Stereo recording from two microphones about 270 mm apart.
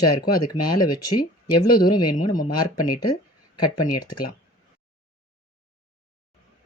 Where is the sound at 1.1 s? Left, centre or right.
Left.